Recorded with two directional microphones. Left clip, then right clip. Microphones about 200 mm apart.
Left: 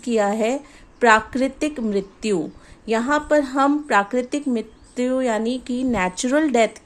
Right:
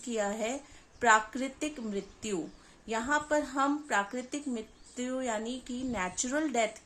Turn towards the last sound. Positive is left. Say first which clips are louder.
# left 13 dB
turn(degrees=40)  # may be behind; listen again after turning